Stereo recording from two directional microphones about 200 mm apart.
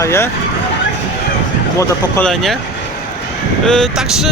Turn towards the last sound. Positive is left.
turn(degrees=0)  # may be behind; listen again after turning